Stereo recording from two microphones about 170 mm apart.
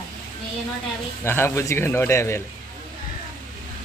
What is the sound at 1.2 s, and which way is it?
A man's voice, 15° left (ahead or behind).